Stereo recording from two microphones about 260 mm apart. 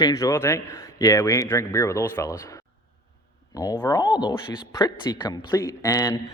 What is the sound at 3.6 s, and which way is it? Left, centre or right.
A man's voice, centre.